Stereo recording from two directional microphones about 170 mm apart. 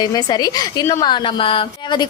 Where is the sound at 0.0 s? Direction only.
25° left (ahead or behind).